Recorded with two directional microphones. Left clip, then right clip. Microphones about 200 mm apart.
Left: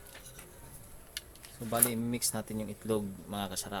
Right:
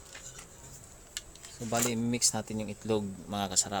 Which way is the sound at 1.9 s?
30° right (ahead or behind).